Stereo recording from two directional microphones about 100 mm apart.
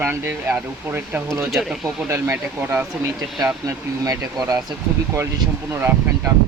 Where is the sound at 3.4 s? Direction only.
35° right (ahead or behind).